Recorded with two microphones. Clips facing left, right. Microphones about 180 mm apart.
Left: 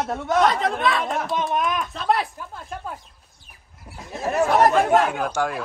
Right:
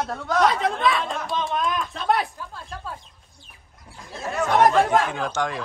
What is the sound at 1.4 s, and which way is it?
Speech, 20° left (ahead or behind).